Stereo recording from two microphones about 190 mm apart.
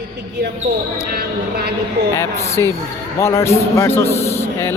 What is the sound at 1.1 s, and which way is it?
Speech, 55° right (ahead or behind).